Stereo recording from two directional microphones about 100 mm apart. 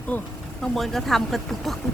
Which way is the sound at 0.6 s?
Centre (ahead or behind).